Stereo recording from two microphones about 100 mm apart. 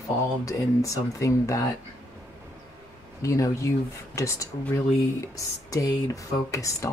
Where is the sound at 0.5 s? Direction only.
35° left (ahead or behind).